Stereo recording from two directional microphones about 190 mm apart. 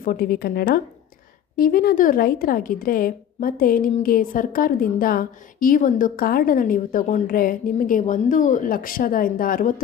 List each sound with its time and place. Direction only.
0.0 s a woman's voice: 50° left (ahead or behind)